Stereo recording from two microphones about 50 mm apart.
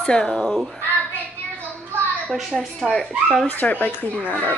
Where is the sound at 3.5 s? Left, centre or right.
Left.